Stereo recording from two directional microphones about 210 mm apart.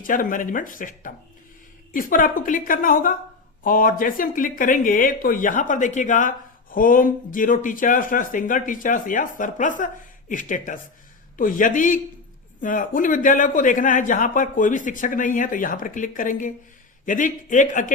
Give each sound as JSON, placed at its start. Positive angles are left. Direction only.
{"t": 0.0, "sound": "speech", "side_deg": 40}